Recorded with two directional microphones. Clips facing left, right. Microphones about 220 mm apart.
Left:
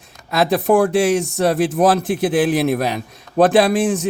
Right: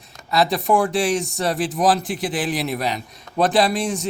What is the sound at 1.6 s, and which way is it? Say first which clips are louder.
A man's voice: left 4 dB; 55° left (ahead or behind).